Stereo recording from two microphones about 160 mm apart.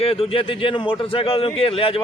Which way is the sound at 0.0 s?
35° left (ahead or behind).